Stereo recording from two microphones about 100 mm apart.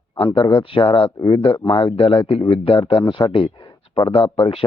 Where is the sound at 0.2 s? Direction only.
55° left (ahead or behind).